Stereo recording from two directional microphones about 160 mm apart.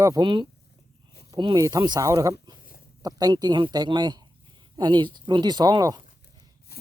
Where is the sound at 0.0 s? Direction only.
25° right (ahead or behind).